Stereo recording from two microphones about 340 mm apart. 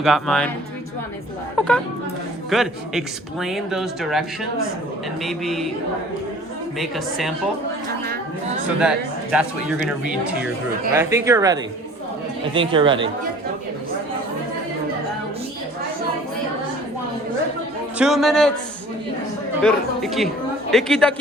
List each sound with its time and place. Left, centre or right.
0.0 s speech: centre
1.5 s speech: centre
6.7 s speech: centre
8.0 s chatter: right
8.8 s speech: centre
10.9 s speech: centre
17.9 s speech: centre
19.6 s speech: centre